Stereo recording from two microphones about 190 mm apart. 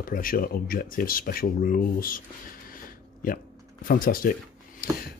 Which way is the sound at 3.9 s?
50° left (ahead or behind).